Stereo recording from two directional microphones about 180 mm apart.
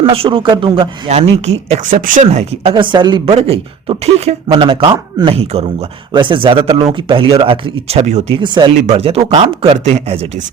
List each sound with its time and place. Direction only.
0.0 s speech: 30° right (ahead or behind)
1.9 s speech: 50° right (ahead or behind)